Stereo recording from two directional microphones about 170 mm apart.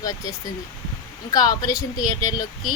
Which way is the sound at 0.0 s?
20° left (ahead or behind).